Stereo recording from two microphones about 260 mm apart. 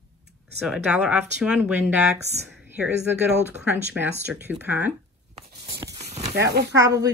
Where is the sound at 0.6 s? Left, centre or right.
Centre.